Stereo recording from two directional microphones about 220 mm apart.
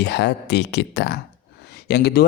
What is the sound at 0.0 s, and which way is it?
A man's voice, 50° left (ahead or behind).